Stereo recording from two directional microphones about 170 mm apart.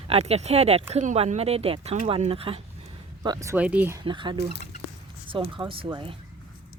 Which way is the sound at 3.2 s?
20° right (ahead or behind).